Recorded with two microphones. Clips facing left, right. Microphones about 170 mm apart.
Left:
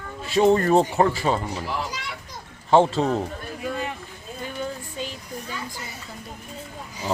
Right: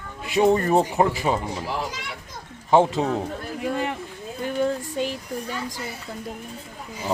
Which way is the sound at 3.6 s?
65° right (ahead or behind).